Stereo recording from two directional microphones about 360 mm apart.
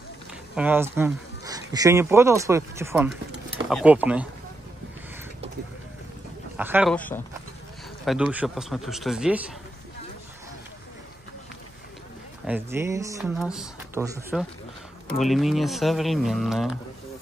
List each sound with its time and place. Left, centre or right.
0.6 s speech: centre
6.5 s speech: centre
12.4 s speech: centre